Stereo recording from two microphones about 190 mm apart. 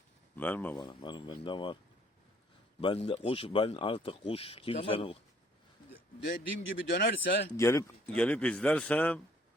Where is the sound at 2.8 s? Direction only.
30° left (ahead or behind).